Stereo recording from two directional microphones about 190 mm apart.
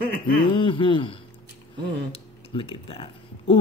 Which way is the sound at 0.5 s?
25° left (ahead or behind).